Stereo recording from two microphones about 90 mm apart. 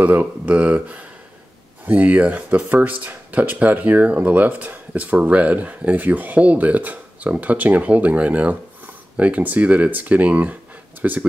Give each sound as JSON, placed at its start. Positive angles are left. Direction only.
{"t": 0.0, "sound": "speech", "side_deg": -20}